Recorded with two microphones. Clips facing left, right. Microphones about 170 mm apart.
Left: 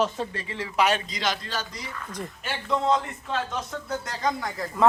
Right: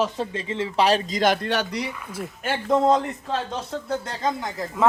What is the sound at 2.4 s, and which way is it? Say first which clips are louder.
A man's voice: right 5 dB; 45° right (ahead or behind).